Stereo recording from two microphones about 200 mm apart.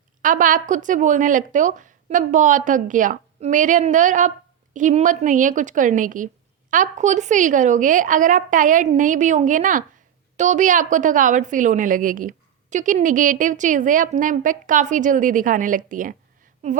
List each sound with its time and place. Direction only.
0.2 s speech: 40° right (ahead or behind)